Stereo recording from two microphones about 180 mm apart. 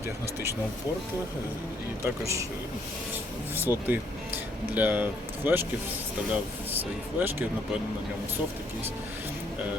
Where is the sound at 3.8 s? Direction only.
10° right (ahead or behind).